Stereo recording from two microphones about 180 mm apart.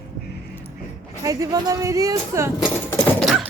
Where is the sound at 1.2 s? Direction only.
20° right (ahead or behind).